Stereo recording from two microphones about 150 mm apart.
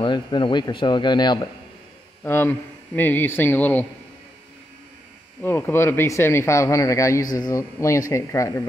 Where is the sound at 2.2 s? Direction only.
15° left (ahead or behind).